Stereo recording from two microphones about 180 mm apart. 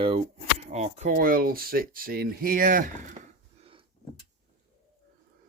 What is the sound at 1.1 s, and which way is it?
Speech, 50° right (ahead or behind).